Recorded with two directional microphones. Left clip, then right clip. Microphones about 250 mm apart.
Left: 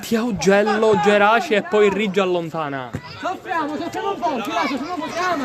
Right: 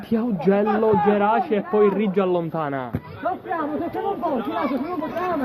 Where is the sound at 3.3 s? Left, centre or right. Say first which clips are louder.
Left 2 dB; left.